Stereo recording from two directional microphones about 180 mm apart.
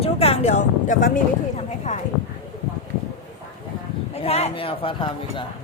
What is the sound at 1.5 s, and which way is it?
Clip-clop, 40° left (ahead or behind).